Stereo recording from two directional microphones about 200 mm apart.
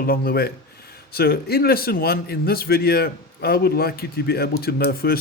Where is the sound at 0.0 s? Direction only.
50° left (ahead or behind).